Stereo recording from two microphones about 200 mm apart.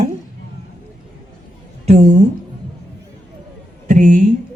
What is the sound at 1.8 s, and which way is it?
Speech, 35° right (ahead or behind).